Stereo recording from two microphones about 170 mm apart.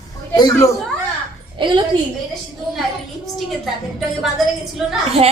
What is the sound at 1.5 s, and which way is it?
Speech, 30° right (ahead or behind).